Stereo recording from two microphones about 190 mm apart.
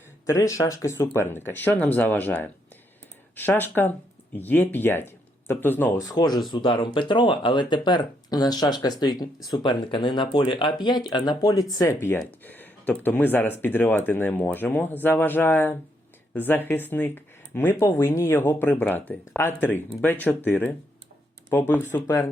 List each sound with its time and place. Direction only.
0.3 s speech: 15° left (ahead or behind)
6.1 s speech: 20° left (ahead or behind)